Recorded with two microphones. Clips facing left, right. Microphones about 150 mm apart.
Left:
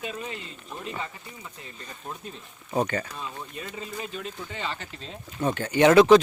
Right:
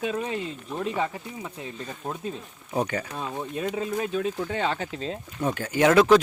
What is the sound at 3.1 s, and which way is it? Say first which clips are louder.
Speech: right 6 dB; 70° right (ahead or behind).